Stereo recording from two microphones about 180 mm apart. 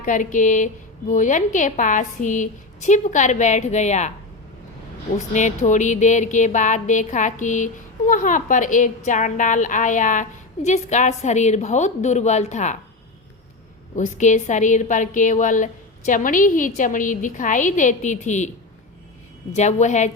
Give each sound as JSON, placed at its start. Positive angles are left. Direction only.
{"t": 0.0, "sound": "speech", "side_deg": 45}
{"t": 5.1, "sound": "speech", "side_deg": 40}
{"t": 13.9, "sound": "speech", "side_deg": 40}
{"t": 19.5, "sound": "a woman's voice", "side_deg": 40}